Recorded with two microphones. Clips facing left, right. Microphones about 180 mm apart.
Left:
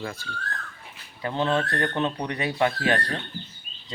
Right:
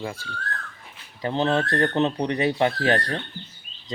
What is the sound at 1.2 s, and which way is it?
Speech, 25° right (ahead or behind).